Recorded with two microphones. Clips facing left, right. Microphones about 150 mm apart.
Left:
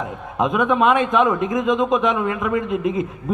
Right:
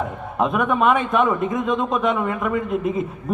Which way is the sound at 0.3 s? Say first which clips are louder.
Left 2 dB; centre (ahead or behind).